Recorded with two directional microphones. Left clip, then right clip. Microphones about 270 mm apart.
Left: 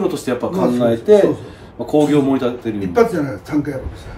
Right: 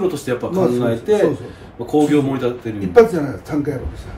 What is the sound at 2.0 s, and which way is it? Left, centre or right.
Speech, centre.